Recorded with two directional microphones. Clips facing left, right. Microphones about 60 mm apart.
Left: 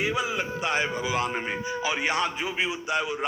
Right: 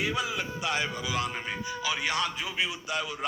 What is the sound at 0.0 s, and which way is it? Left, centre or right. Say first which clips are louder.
A man's voice: left 3 dB; left.